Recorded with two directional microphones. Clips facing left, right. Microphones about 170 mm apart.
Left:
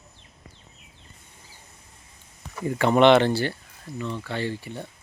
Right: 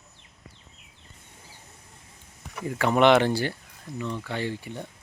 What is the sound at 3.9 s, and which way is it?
Speech, 10° left (ahead or behind).